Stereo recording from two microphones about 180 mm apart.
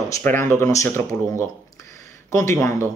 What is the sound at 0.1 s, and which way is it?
Speech, 15° left (ahead or behind).